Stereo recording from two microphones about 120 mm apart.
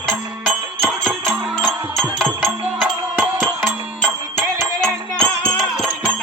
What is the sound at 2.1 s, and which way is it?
Music, 10° right (ahead or behind).